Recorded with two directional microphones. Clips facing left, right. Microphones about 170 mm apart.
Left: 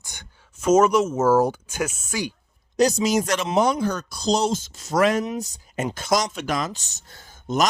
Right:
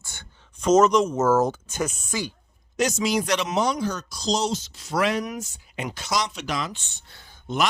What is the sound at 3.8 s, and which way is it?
Speech, 55° left (ahead or behind).